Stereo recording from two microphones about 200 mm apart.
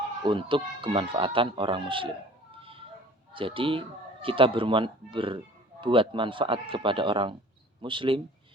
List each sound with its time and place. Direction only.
0.3 s speech: 25° right (ahead or behind)